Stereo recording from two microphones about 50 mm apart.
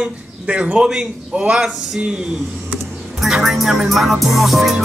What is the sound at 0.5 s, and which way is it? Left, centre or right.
Speech, right.